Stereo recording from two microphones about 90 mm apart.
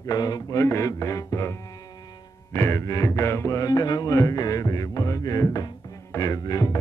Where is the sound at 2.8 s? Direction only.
40° left (ahead or behind).